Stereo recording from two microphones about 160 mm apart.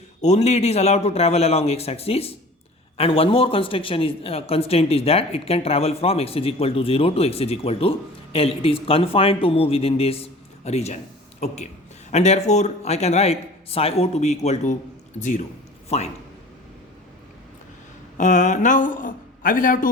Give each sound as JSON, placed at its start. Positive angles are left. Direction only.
{"t": 0.2, "sound": "a man's voice", "side_deg": 45}
{"t": 18.2, "sound": "a man's voice", "side_deg": 50}